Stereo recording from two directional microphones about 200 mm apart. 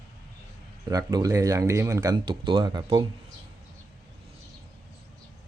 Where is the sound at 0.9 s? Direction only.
20° right (ahead or behind).